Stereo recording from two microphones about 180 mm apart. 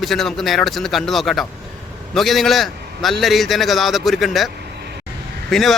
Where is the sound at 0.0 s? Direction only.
Centre (ahead or behind).